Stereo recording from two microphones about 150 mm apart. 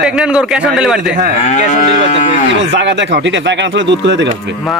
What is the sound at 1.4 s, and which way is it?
Livestock, 50° left (ahead or behind).